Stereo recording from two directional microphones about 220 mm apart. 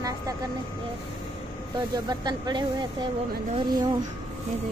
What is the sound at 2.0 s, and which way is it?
Speech, 20° right (ahead or behind).